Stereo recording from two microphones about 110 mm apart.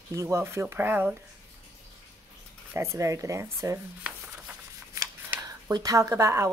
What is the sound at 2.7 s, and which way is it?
A woman's voice, 25° right (ahead or behind).